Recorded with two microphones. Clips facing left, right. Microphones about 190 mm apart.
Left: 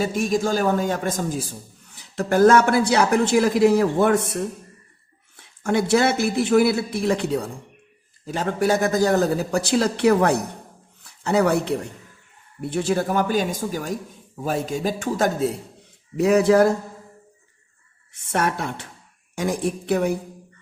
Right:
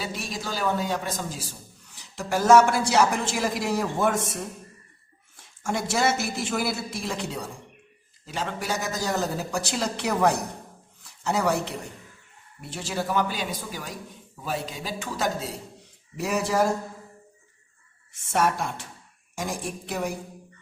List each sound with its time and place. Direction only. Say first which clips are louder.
0.0 s a man's voice: left 11 dB; 45° left (ahead or behind)
5.4 s speech: left 7 dB; 60° left (ahead or behind)
12.7 s a man's voice: left 6 dB; 50° left (ahead or behind)
18.1 s speech: left 1 dB; 60° left (ahead or behind)